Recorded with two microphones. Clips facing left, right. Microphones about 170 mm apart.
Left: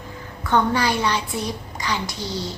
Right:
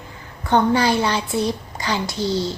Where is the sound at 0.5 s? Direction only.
30° right (ahead or behind).